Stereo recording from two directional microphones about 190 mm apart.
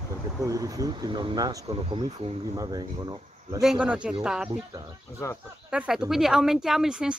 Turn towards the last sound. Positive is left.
turn(degrees=-5)  # may be behind; listen again after turning